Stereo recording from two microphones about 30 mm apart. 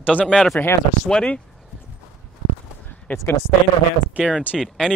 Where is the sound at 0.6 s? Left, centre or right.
Left.